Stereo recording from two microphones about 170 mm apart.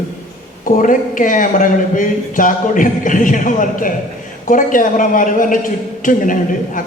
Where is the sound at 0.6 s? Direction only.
50° left (ahead or behind).